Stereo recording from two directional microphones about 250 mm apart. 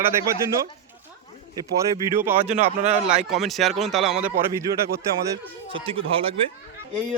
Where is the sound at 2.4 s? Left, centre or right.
Right.